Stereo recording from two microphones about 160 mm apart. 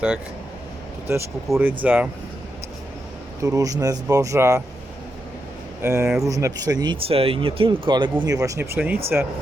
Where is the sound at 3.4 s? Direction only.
20° right (ahead or behind).